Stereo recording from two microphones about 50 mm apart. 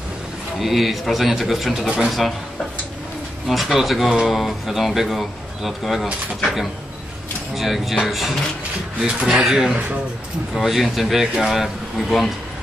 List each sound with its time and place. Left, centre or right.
0.6 s a man's voice: centre
3.4 s a man's voice: centre
9.0 s speech: right
9.4 s a man's voice: centre